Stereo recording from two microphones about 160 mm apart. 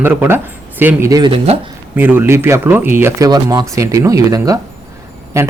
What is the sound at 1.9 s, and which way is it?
Speech, 10° right (ahead or behind).